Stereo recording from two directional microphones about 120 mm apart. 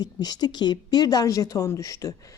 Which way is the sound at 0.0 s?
35° left (ahead or behind).